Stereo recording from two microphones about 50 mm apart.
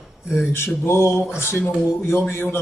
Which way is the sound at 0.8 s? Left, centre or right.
Left.